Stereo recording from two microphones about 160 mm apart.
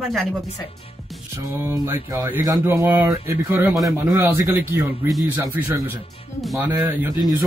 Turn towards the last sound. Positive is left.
turn(degrees=-10)  # may be behind; listen again after turning